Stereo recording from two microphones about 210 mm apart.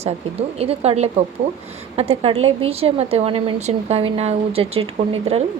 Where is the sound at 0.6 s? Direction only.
30° right (ahead or behind).